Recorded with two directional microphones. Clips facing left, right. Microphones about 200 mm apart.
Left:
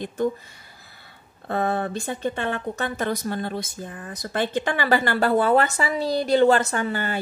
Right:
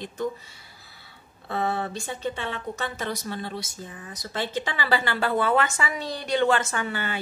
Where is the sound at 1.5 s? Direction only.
50° left (ahead or behind).